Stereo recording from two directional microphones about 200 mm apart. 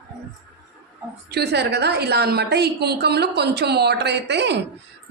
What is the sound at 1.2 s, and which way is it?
A woman's voice, 55° right (ahead or behind).